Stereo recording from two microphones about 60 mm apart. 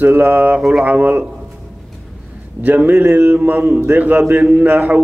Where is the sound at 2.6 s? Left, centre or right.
Right.